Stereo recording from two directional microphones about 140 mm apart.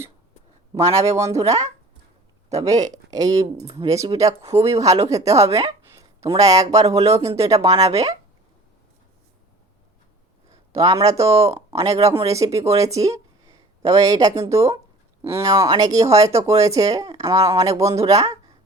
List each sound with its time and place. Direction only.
0.7 s speech: 25° right (ahead or behind)
2.6 s speech: 25° right (ahead or behind)
10.8 s speech: 25° right (ahead or behind)